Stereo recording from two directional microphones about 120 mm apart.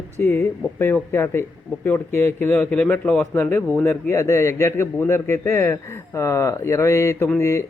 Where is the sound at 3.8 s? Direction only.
20° left (ahead or behind).